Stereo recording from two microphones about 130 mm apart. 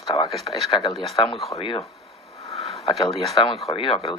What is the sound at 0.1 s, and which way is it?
Speech, 45° left (ahead or behind).